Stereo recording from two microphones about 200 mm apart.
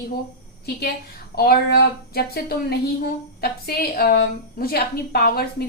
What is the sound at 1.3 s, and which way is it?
A woman's voice, 50° left (ahead or behind).